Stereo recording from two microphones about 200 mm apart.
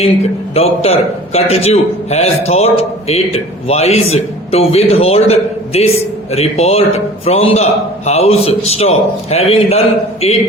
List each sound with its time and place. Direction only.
0.5 s a man's voice: 30° left (ahead or behind)